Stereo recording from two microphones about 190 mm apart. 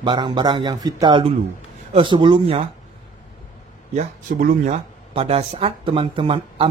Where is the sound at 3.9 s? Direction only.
40° right (ahead or behind).